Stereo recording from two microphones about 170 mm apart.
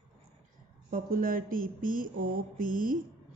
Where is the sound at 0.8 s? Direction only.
55° right (ahead or behind).